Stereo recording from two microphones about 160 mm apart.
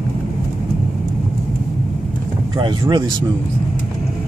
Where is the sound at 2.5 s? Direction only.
30° right (ahead or behind).